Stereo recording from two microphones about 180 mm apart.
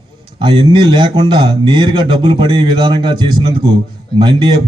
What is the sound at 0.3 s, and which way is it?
A man's voice, 25° right (ahead or behind).